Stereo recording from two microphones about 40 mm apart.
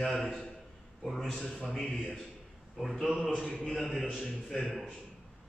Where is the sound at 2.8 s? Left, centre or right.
Centre.